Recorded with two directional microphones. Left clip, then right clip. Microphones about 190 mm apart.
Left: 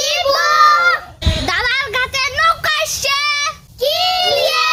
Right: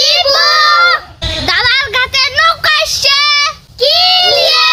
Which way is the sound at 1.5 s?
Centre (ahead or behind).